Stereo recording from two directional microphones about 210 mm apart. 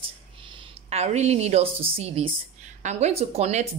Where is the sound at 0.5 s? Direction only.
25° right (ahead or behind).